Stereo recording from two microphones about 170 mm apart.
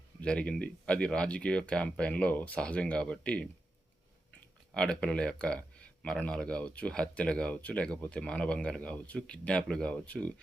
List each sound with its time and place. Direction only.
0.2 s speech: 5° left (ahead or behind)
4.7 s speech: 5° left (ahead or behind)